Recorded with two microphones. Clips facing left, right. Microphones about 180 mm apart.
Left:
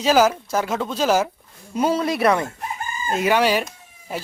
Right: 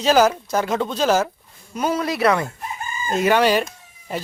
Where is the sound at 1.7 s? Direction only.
30° left (ahead or behind).